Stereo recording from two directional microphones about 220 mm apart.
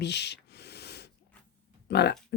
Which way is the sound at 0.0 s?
50° left (ahead or behind).